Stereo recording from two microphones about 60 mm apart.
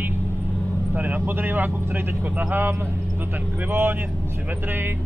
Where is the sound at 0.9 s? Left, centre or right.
Right.